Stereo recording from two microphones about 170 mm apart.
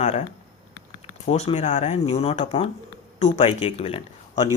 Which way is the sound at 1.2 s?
40° left (ahead or behind).